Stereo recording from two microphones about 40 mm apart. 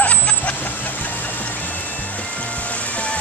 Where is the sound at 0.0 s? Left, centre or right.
Left.